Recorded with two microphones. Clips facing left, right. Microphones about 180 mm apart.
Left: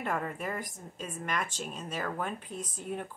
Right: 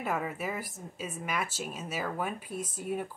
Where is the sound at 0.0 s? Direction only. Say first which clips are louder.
Right 1 dB; 5° right (ahead or behind).